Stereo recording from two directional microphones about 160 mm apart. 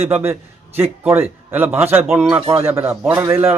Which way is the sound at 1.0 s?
15° right (ahead or behind).